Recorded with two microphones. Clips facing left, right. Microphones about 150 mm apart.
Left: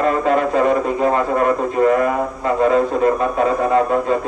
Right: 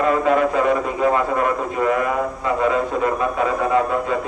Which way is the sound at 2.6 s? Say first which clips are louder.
Left 5 dB; 35° left (ahead or behind).